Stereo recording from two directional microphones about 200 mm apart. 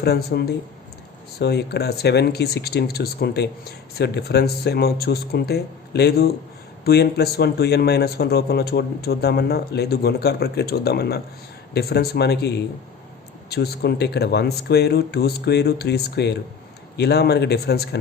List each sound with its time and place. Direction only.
0.0 s speech: 55° left (ahead or behind)